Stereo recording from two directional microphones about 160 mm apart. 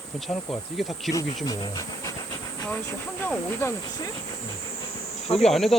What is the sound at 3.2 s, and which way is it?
Speech, 15° left (ahead or behind).